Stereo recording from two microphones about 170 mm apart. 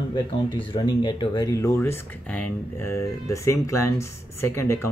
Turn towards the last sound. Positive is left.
turn(degrees=15)  # may be behind; listen again after turning